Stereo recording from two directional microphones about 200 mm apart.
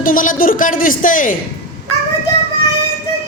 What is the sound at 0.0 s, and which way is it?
A woman's voice, 40° left (ahead or behind).